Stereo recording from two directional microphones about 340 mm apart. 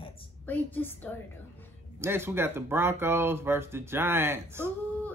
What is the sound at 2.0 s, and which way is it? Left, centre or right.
Speech, centre.